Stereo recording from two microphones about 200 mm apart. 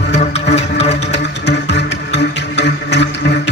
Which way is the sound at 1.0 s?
60° left (ahead or behind).